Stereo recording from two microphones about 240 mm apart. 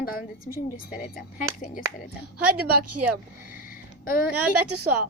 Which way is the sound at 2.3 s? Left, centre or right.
Right.